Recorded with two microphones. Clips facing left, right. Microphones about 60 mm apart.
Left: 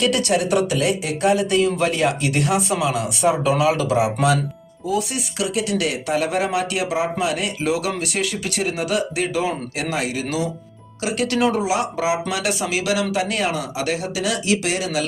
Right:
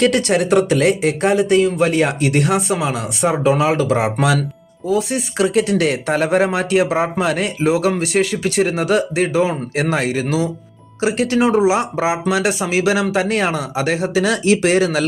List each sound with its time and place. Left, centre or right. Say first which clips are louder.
0.0 s speech: right 4 dB; right
10.2 s speech: right 4 dB; right